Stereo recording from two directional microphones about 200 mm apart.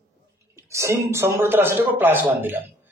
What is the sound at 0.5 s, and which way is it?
Speech, 15° right (ahead or behind).